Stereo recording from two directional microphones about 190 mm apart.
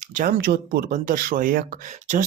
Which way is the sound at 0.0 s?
40° right (ahead or behind).